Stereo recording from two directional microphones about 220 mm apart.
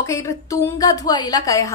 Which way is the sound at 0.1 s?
10° left (ahead or behind).